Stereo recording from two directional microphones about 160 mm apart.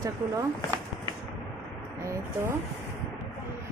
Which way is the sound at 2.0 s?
20° right (ahead or behind).